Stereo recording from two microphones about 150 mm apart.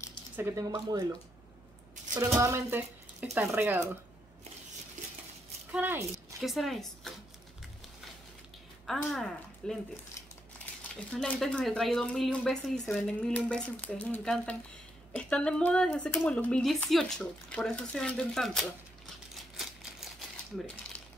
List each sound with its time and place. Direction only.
0.4 s speech: 20° right (ahead or behind)
2.1 s speech: 20° right (ahead or behind)
5.7 s speech: 15° right (ahead or behind)
6.4 s a woman's voice: centre (ahead or behind)
8.8 s speech: centre (ahead or behind)
11.1 s speech: 5° left (ahead or behind)
19.5 s crumpling: centre (ahead or behind)